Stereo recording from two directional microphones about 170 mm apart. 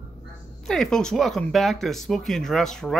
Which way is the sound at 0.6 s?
5° left (ahead or behind).